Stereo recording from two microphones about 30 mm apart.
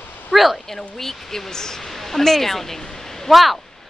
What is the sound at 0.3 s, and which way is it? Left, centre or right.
Speech, centre.